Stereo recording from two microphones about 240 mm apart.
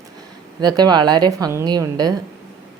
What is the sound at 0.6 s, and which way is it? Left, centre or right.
A woman's voice, centre.